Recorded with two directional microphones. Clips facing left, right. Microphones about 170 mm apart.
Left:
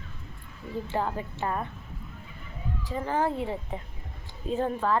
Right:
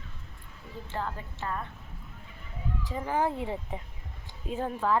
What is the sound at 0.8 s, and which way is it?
Speech, 15° left (ahead or behind).